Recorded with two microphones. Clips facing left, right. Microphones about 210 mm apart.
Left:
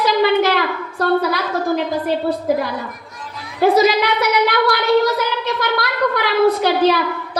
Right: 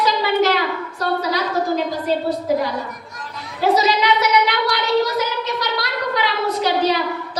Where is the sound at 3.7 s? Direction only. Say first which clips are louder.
Even; 55° left (ahead or behind).